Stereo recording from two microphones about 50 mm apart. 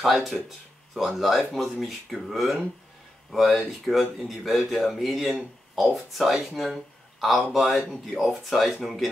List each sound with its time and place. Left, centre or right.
0.0 s speech: centre